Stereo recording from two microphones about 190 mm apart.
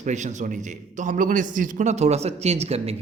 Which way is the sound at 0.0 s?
40° right (ahead or behind).